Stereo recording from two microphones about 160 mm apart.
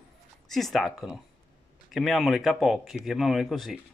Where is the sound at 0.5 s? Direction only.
Centre (ahead or behind).